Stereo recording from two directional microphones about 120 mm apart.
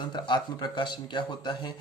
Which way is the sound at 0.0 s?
40° left (ahead or behind).